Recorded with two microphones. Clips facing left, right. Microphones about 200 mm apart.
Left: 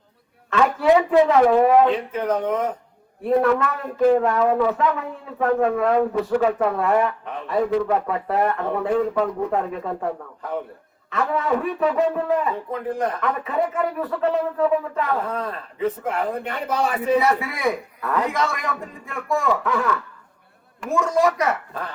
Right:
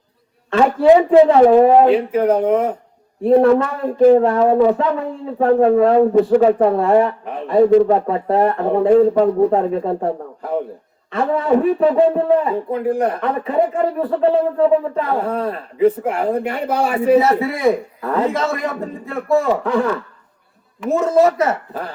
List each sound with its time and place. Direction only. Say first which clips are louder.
0.5 s speech: right 6 dB; 30° right (ahead or behind)